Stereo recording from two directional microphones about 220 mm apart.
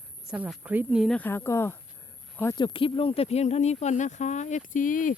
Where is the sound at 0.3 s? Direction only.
5° right (ahead or behind).